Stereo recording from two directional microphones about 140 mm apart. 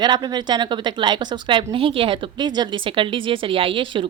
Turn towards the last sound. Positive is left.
turn(degrees=-40)  # may be behind; listen again after turning